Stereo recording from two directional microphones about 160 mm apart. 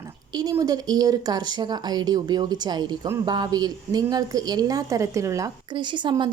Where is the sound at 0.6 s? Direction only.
25° right (ahead or behind).